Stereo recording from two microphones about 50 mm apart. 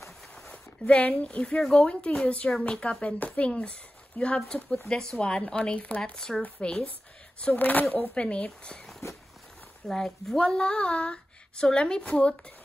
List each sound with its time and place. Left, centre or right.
0.5 s speech: left
6.1 s speech: centre
7.5 s speech: left
8.1 s speech: left
8.6 s speech: centre